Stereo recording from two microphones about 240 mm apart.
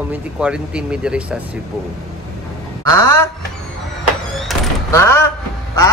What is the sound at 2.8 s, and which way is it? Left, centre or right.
Speech, centre.